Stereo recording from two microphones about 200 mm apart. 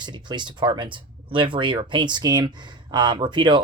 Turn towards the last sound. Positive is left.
turn(degrees=-20)  # may be behind; listen again after turning